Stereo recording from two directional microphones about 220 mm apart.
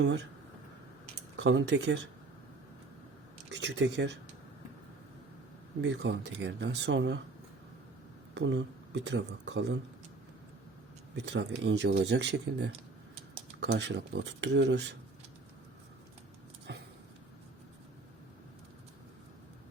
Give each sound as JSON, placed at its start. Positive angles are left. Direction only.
{"t": 0.0, "sound": "speech", "side_deg": -55}
{"t": 1.4, "sound": "speech", "side_deg": -55}
{"t": 3.5, "sound": "speech", "side_deg": -55}
{"t": 5.8, "sound": "speech", "side_deg": -55}
{"t": 8.4, "sound": "speech", "side_deg": -55}
{"t": 11.1, "sound": "speech", "side_deg": -55}
{"t": 16.7, "sound": "a sound", "side_deg": -50}